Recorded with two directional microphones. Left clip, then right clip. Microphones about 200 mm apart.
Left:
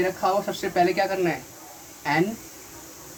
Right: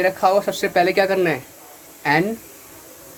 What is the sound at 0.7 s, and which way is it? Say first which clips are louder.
Speech: right 5 dB; 55° right (ahead or behind).